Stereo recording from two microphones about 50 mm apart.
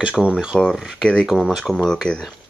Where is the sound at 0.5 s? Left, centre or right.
Centre.